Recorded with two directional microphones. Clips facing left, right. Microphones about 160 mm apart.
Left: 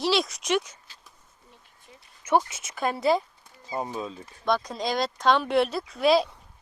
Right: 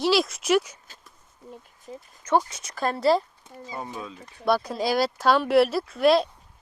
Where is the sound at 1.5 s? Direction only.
45° right (ahead or behind).